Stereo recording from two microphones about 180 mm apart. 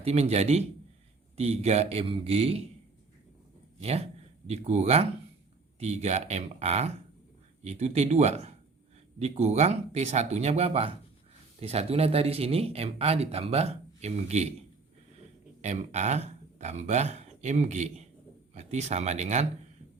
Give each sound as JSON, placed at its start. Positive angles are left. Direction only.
{"t": 0.0, "sound": "speech", "side_deg": -35}
{"t": 3.8, "sound": "speech", "side_deg": -35}
{"t": 15.6, "sound": "speech", "side_deg": -40}